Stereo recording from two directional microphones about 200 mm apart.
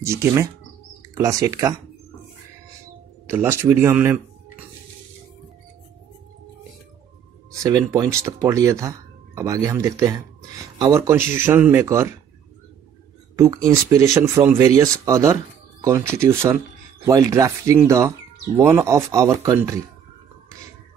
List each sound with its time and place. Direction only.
0.0 s speech: 15° right (ahead or behind)
3.3 s speech: 10° right (ahead or behind)
7.5 s speech: 15° right (ahead or behind)
13.4 s speech: 15° right (ahead or behind)